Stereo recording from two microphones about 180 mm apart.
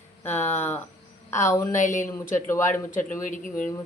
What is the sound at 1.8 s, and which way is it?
Speech, 45° left (ahead or behind).